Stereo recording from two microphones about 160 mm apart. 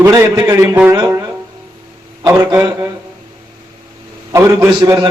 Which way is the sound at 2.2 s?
20° right (ahead or behind).